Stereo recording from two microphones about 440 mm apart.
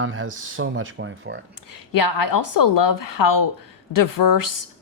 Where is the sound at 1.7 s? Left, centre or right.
Left.